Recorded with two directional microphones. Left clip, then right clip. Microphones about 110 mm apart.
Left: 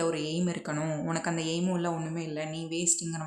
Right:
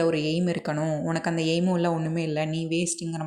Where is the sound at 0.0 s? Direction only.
35° right (ahead or behind).